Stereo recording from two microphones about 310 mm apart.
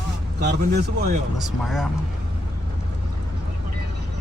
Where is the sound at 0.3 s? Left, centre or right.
Right.